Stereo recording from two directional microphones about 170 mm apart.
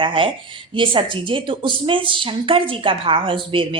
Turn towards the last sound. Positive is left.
turn(degrees=-30)  # may be behind; listen again after turning